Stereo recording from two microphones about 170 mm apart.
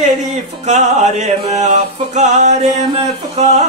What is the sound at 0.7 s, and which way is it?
Music, 45° right (ahead or behind).